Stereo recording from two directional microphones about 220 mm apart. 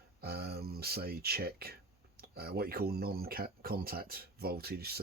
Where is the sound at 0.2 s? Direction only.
45° right (ahead or behind).